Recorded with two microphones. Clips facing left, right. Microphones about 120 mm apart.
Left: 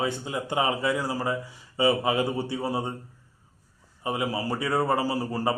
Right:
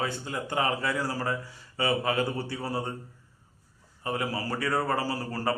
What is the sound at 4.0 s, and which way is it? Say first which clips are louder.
A man's voice: left 3 dB; 15° left (ahead or behind).